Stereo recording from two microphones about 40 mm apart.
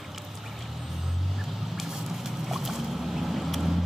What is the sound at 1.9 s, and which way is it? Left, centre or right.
Boat, centre.